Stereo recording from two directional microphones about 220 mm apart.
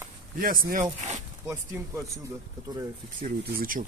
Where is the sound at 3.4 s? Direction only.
40° right (ahead or behind).